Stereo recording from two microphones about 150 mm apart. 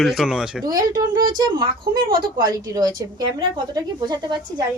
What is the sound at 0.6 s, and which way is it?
A woman's voice, 25° right (ahead or behind).